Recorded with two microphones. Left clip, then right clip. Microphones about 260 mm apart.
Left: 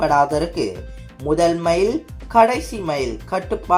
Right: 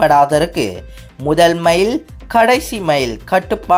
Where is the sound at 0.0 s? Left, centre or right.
Right.